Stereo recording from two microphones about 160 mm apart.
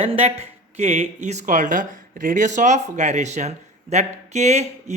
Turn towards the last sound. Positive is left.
turn(degrees=-45)  # may be behind; listen again after turning